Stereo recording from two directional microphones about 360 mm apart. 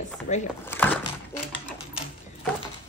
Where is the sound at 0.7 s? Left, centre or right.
Centre.